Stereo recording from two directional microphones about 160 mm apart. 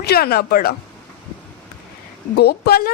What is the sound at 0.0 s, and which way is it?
Speech, 75° left (ahead or behind).